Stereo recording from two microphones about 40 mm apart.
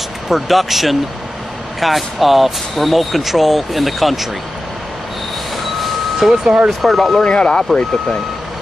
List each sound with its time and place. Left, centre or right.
0.3 s speech: centre
6.1 s speech: centre
7.2 s speech: left